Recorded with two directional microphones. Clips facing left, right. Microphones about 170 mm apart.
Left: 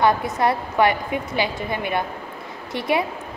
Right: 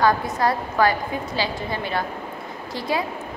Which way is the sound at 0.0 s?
25° left (ahead or behind).